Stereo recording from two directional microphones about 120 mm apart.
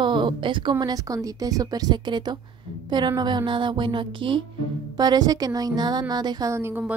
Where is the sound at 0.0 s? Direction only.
40° right (ahead or behind).